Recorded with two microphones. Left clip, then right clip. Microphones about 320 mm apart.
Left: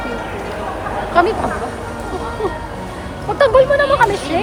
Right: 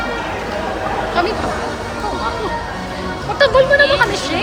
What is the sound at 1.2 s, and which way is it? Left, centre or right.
Speech, left.